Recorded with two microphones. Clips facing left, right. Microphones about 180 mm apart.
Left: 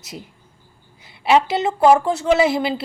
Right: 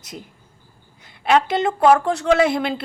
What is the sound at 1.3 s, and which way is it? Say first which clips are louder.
A woman's voice: left 1 dB; 5° left (ahead or behind).